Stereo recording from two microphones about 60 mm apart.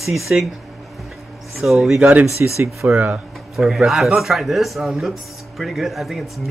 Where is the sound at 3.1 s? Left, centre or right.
Centre.